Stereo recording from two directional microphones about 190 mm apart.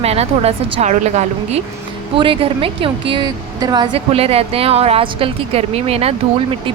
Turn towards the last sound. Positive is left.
turn(degrees=-30)  # may be behind; listen again after turning